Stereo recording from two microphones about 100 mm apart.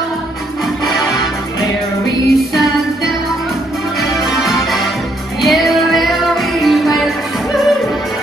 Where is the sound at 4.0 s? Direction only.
Centre (ahead or behind).